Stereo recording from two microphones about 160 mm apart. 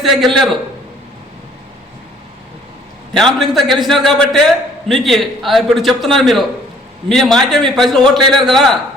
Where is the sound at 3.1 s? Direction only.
Centre (ahead or behind).